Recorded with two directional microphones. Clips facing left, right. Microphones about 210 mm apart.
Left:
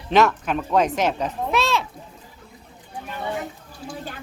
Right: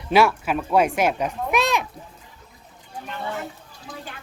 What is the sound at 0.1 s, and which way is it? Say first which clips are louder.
Speech: even; 10° right (ahead or behind).